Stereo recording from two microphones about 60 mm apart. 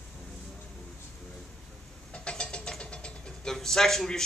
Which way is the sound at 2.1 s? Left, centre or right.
Centre.